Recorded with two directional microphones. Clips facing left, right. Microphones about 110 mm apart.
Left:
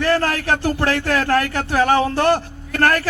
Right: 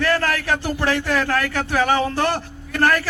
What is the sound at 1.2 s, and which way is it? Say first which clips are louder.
A man's voice: left 3 dB; 35° left (ahead or behind).